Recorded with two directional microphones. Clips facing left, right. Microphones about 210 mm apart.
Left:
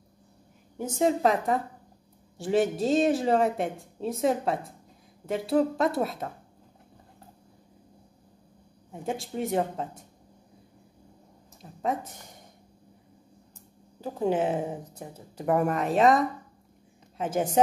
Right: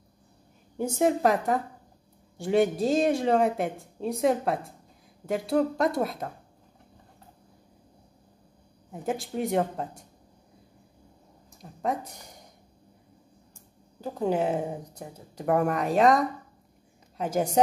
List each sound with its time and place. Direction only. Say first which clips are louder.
0.7 s a woman's voice: right 1 dB; 10° right (ahead or behind)
8.9 s speech: right 2 dB; centre (ahead or behind)
11.8 s speech: even; centre (ahead or behind)
14.0 s speech: even; 5° left (ahead or behind)